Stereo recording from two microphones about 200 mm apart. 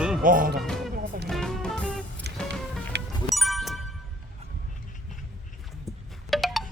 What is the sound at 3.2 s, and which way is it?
Bicycle bell, centre (ahead or behind).